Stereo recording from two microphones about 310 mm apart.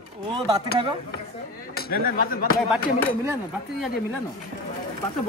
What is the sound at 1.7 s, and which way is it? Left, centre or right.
Speech, left.